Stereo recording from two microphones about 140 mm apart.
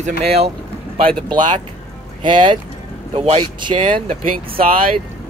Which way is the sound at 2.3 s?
35° right (ahead or behind).